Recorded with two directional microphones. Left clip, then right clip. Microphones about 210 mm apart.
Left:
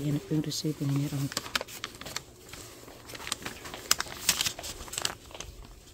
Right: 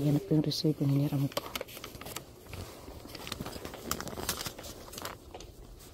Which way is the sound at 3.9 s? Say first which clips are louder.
Left 9 dB; 15° left (ahead or behind).